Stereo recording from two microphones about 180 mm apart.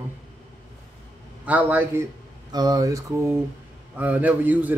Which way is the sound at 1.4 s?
10° right (ahead or behind).